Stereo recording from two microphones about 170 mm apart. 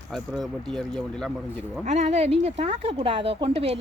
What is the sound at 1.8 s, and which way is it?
Speech, 40° right (ahead or behind).